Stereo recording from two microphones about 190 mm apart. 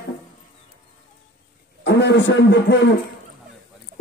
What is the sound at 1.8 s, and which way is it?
A man's voice, 65° left (ahead or behind).